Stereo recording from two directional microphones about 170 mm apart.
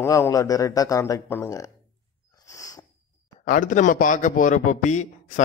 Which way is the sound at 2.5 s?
20° left (ahead or behind).